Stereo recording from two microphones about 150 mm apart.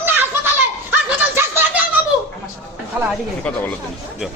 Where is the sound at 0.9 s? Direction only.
10° right (ahead or behind).